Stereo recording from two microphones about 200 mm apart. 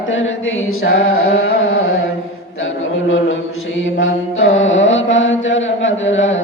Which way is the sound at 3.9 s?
80° left.